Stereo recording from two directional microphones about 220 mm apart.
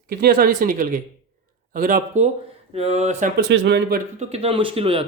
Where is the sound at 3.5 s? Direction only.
55° right (ahead or behind).